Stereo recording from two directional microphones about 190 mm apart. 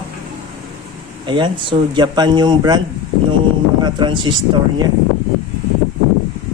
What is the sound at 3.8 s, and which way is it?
Speech, 25° right (ahead or behind).